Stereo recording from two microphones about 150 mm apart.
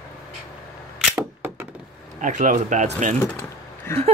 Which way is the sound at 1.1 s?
15° right (ahead or behind).